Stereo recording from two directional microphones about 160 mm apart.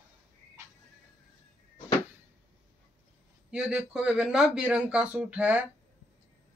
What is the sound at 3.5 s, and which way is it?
Speech, 5° right (ahead or behind).